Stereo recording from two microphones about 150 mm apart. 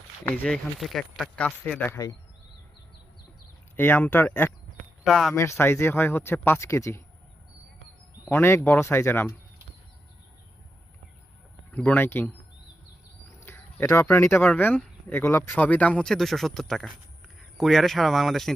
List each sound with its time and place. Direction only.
0.3 s speech: 5° left (ahead or behind)
3.8 s speech: 15° left (ahead or behind)
5.0 s speech: centre (ahead or behind)
5.3 s speech: 20° left (ahead or behind)
8.2 s speech: 15° left (ahead or behind)
11.7 s speech: 10° left (ahead or behind)
13.4 s speech: 15° left (ahead or behind)